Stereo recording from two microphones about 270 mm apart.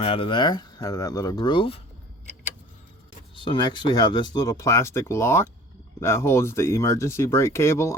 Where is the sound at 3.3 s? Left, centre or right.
Centre.